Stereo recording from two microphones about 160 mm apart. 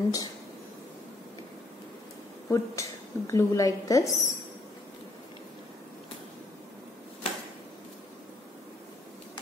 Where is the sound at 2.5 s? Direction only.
20° left (ahead or behind).